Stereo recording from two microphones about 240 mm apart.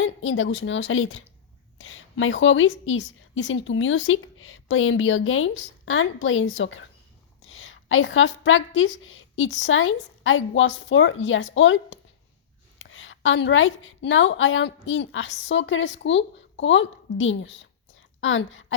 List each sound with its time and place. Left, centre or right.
0.0 s a woman's voice: left